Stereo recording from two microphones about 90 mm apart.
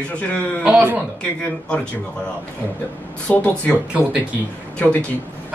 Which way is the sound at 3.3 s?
15° left (ahead or behind).